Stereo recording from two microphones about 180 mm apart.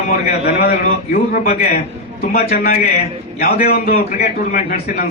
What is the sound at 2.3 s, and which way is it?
Speech, 55° left (ahead or behind).